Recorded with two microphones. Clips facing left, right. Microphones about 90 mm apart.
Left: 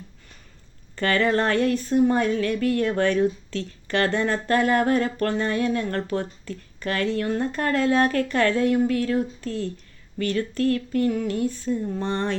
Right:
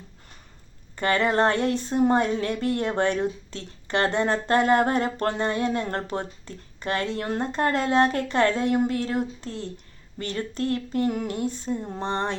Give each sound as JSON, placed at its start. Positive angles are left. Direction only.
{"t": 0.9, "sound": "speech", "side_deg": -20}